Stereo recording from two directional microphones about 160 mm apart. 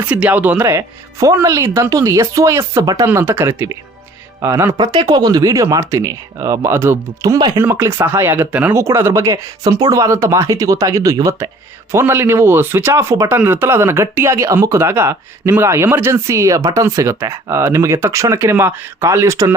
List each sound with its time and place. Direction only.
0.1 s speech: 10° right (ahead or behind)